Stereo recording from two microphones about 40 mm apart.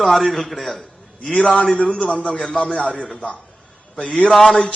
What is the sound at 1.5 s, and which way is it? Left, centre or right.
Speech, left.